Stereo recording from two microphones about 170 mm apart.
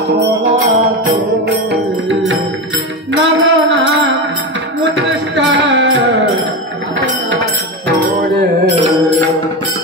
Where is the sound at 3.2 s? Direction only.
90° right.